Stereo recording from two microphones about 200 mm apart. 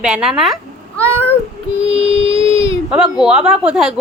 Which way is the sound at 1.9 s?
30° right (ahead or behind).